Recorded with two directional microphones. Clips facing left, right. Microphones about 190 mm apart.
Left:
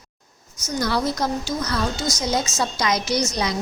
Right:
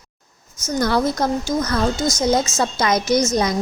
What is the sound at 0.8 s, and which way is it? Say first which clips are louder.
A woman's voice: right 4 dB; 50° right (ahead or behind).